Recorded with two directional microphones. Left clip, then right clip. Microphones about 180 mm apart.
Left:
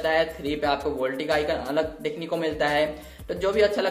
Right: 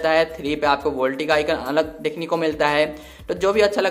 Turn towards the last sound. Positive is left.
turn(degrees=-35)  # may be behind; listen again after turning